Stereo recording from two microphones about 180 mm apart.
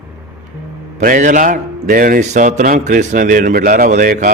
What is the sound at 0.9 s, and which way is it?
A man's voice, 45° right (ahead or behind).